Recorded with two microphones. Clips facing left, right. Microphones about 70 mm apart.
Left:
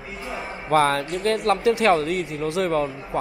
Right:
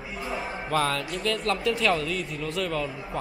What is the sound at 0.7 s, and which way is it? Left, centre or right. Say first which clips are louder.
Speech: left 7 dB; left.